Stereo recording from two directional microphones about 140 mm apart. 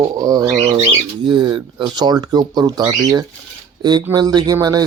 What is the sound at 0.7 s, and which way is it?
Speech, 40° right (ahead or behind).